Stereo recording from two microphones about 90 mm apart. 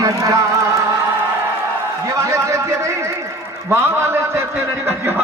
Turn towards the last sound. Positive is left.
turn(degrees=-30)  # may be behind; listen again after turning